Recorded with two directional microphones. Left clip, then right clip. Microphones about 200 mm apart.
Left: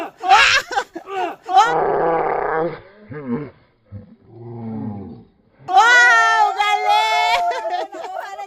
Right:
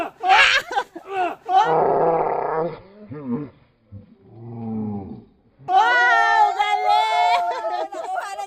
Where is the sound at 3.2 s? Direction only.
30° left (ahead or behind).